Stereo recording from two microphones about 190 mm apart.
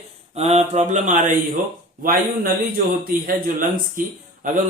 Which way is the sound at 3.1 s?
45° right (ahead or behind).